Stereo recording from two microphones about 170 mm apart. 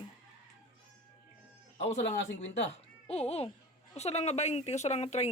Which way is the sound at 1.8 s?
40° left (ahead or behind).